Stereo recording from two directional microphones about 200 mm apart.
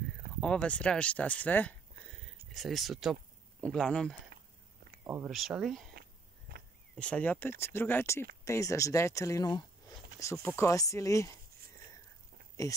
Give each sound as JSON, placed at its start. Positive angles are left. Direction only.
{"t": 0.4, "sound": "speech", "side_deg": 5}
{"t": 5.0, "sound": "speech", "side_deg": -10}
{"t": 7.0, "sound": "speech", "side_deg": 5}
{"t": 12.6, "sound": "speech", "side_deg": 15}